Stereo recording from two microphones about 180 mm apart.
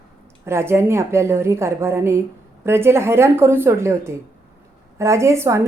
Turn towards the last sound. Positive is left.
turn(degrees=-15)  # may be behind; listen again after turning